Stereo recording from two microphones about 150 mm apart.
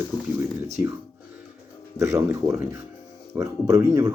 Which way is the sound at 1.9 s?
20° right (ahead or behind).